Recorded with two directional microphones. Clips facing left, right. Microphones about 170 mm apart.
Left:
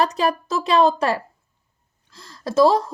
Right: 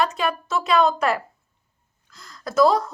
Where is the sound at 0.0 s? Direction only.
35° left (ahead or behind).